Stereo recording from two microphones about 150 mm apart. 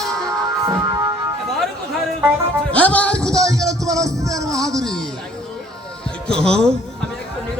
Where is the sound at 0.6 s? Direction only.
25° right (ahead or behind).